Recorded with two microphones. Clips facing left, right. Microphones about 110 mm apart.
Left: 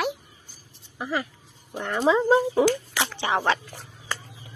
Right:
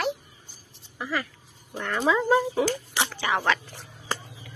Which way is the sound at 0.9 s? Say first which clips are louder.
Left 2 dB; 20° left (ahead or behind).